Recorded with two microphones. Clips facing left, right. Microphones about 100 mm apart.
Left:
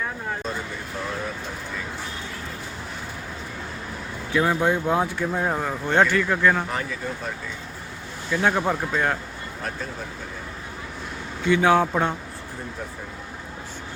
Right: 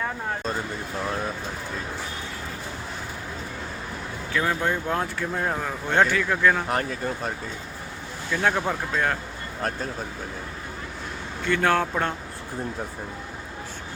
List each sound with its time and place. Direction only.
4.3 s speech: 10° left (ahead or behind)
6.7 s speech: 50° right (ahead or behind)
8.3 s speech: 5° left (ahead or behind)
11.4 s a man's voice: 5° left (ahead or behind)